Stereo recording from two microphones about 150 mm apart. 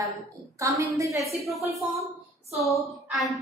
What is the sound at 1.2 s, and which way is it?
Speech, 45° right (ahead or behind).